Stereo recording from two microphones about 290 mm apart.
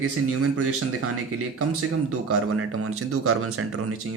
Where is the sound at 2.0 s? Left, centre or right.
Right.